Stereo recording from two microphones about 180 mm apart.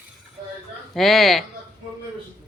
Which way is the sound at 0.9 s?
Centre (ahead or behind).